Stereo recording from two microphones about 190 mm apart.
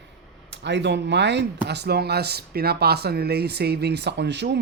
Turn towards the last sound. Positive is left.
turn(degrees=-65)  # may be behind; listen again after turning